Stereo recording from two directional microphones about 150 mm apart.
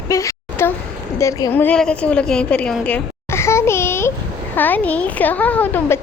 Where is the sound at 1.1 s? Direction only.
20° left (ahead or behind).